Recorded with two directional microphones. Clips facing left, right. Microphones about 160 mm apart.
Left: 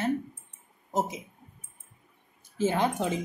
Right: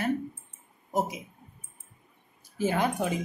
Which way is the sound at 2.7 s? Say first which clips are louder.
Right 2 dB; 20° left (ahead or behind).